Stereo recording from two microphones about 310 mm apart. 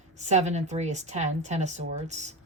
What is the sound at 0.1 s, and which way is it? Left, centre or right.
A woman's voice, right.